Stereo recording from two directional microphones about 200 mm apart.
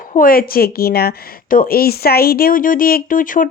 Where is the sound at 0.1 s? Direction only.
45° left (ahead or behind).